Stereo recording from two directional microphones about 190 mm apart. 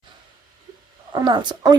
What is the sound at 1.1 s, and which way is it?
Speech, 25° right (ahead or behind).